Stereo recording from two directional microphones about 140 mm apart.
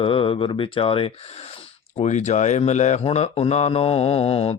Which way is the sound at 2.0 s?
55° left (ahead or behind).